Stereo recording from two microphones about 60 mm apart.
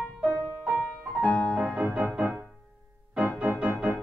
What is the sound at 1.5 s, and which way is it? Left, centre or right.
Music, centre.